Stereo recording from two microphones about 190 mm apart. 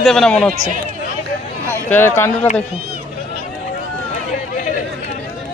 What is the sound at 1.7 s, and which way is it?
Speech, 10° left (ahead or behind).